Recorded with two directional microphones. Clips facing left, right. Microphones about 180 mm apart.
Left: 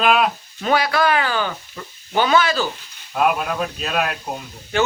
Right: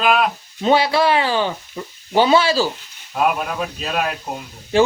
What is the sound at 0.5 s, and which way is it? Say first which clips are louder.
Speech: right 4 dB; 25° right (ahead or behind).